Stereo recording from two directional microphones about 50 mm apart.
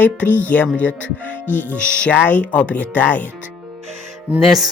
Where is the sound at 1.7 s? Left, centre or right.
Left.